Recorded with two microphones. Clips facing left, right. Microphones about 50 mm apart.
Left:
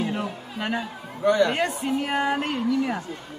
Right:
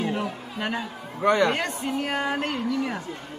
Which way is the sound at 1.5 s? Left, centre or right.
Centre.